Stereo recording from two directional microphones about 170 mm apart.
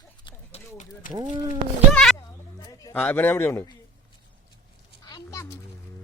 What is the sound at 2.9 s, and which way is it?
Speech, 10° left (ahead or behind).